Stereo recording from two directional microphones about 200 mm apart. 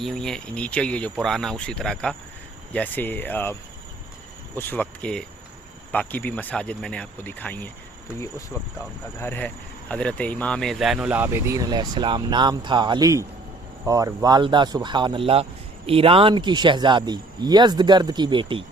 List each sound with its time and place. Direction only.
0.0 s speech: centre (ahead or behind)
9.1 s speech: 10° left (ahead or behind); by 18.6 s 25° right (ahead or behind)